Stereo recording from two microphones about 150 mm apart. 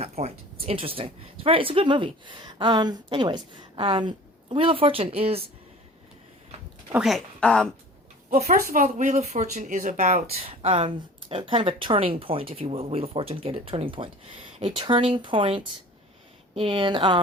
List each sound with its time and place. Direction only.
0.0 s speech: 45° right (ahead or behind)
6.9 s a woman's voice: centre (ahead or behind)
8.3 s speech: 45° right (ahead or behind)
8.6 s speech: 60° right (ahead or behind); by 17.2 s 35° right (ahead or behind)